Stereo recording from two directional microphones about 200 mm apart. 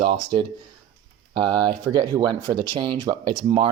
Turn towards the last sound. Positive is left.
turn(degrees=-25)  # may be behind; listen again after turning